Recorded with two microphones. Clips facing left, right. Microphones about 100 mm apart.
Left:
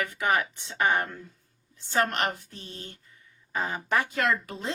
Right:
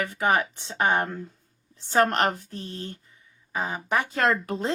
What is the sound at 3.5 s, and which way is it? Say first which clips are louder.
Speech: right 1 dB; 15° right (ahead or behind).